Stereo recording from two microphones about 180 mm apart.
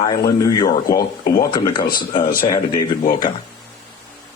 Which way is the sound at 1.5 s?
25° left (ahead or behind).